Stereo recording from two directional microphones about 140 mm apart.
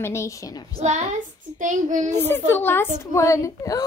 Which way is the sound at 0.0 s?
20° left (ahead or behind).